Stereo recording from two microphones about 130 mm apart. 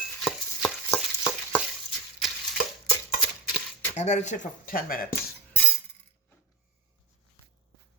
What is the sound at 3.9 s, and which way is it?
Speech, 60° left (ahead or behind).